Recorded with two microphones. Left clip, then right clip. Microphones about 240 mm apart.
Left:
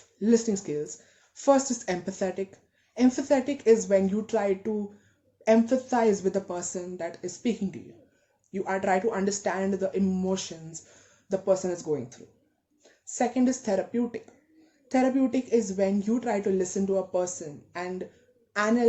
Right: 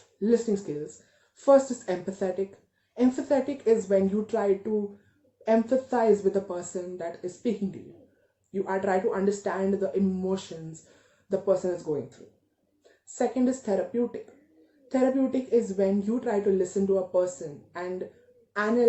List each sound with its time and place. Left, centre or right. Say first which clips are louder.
0.5 s speech: even; left
8.6 s speech: left 1 dB; left
13.1 s speech: even; left